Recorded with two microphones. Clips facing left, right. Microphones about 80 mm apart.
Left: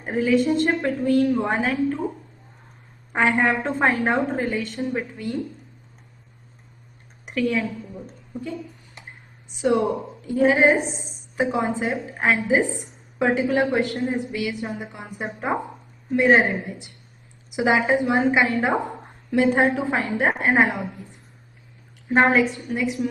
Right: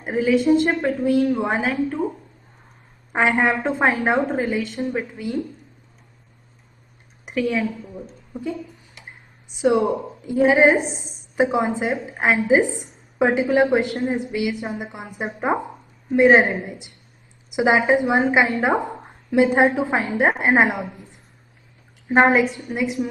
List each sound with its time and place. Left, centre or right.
0.0 s a woman's voice: centre
3.1 s a woman's voice: centre
4.5 s a woman's voice: centre
7.2 s a woman's voice: centre
8.3 s a sound: centre
10.2 s a woman's voice: centre